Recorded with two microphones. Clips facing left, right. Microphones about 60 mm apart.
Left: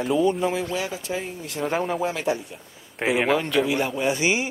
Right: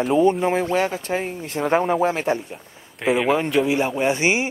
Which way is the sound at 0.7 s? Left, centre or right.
Right.